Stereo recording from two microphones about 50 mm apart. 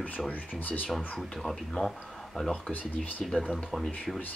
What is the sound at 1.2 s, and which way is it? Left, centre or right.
Speech, centre.